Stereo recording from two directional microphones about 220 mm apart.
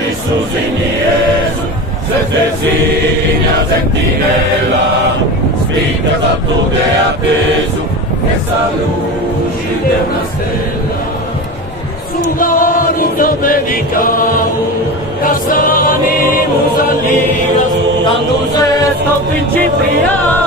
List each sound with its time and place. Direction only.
12.4 s chant: 40° left (ahead or behind)
15.2 s choir: 40° left (ahead or behind)